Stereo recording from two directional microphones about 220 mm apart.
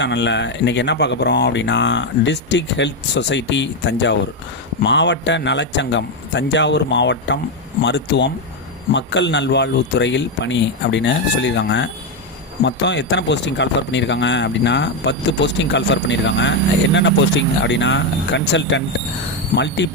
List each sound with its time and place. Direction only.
0.0 s speech: 55° left (ahead or behind)